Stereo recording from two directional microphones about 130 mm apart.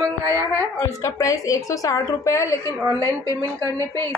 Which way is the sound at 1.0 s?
25° left (ahead or behind).